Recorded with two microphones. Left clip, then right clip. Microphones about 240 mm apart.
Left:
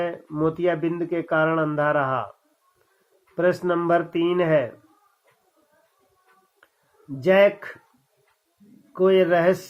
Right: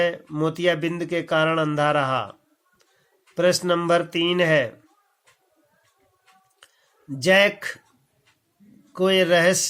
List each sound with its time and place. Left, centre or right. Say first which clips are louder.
0.0 s speech: right 2 dB; right
3.3 s speech: right 1 dB; right
7.2 s speech: even; right
8.9 s speech: even; right